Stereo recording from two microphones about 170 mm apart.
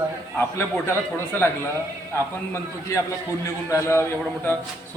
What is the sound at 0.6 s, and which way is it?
Speech, 15° left (ahead or behind).